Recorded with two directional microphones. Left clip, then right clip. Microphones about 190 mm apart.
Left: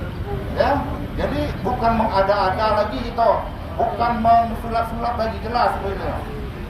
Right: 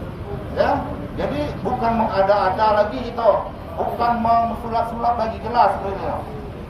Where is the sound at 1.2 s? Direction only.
5° left (ahead or behind).